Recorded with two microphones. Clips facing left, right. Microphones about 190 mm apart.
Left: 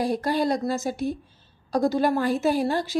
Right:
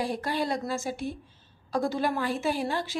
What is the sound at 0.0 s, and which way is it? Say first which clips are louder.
A woman's voice: left 6 dB; 40° left (ahead or behind).